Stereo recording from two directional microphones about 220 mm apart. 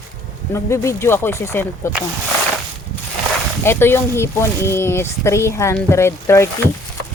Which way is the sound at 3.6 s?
10° left (ahead or behind).